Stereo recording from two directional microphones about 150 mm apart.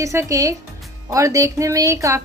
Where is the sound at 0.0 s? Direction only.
20° right (ahead or behind).